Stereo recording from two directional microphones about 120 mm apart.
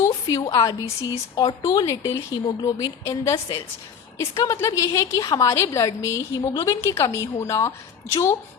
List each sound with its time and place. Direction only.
0.1 s a woman's voice: 35° left (ahead or behind)
4.5 s a woman's voice: 25° left (ahead or behind)